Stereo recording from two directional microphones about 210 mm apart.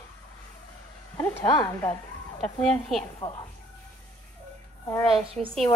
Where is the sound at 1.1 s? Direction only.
15° left (ahead or behind).